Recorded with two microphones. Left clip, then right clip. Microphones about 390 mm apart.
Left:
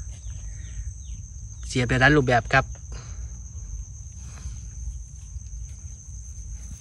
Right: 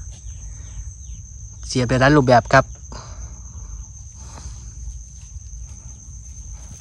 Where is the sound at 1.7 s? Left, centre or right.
Centre.